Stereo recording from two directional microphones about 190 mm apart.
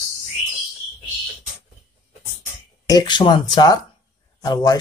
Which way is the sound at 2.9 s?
20° left (ahead or behind).